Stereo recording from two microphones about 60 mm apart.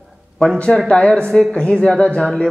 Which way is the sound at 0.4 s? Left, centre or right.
Centre.